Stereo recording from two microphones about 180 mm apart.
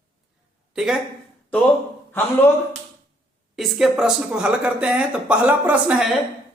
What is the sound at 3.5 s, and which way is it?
A woman's voice, centre (ahead or behind).